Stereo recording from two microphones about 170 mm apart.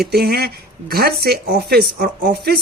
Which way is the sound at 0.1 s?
65° right (ahead or behind).